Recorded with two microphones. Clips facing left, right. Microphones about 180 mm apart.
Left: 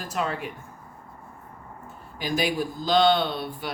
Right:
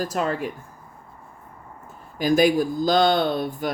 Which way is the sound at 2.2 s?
45° right (ahead or behind).